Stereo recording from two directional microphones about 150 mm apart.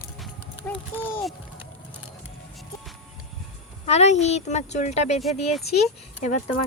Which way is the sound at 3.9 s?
45° left (ahead or behind).